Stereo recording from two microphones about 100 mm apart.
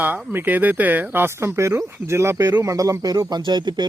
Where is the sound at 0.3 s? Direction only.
20° right (ahead or behind).